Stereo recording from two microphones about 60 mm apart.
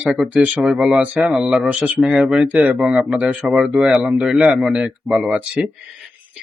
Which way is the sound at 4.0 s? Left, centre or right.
Right.